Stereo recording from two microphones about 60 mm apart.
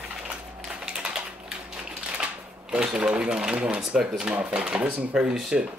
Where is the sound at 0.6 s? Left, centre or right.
Centre.